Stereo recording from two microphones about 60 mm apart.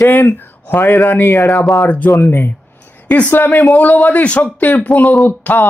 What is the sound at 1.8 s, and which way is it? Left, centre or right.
Speech, left.